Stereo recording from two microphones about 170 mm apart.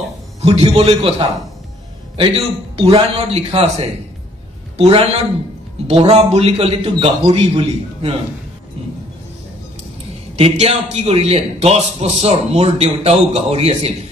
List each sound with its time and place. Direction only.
0.4 s a man's voice: 35° right (ahead or behind)
2.1 s a man's voice: 30° right (ahead or behind)
10.3 s a man's voice: 35° right (ahead or behind)